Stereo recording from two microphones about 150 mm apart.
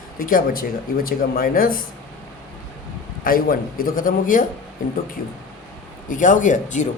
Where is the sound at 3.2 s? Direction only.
70° left (ahead or behind).